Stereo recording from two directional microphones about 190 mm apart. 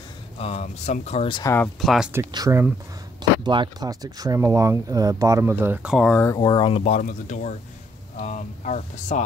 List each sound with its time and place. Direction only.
0.4 s speech: 35° left (ahead or behind)
1.4 s speech: 15° left (ahead or behind)
1.8 s speech: centre (ahead or behind)
2.1 s speech: 15° right (ahead or behind)
6.3 s speech: 25° left (ahead or behind); by 9.2 s 40° left (ahead or behind)